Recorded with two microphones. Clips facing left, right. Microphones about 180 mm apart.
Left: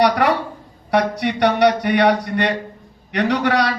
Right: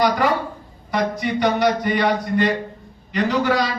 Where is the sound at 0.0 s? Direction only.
70° left (ahead or behind).